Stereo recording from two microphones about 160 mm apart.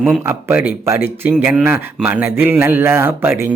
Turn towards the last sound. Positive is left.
turn(degrees=-15)  # may be behind; listen again after turning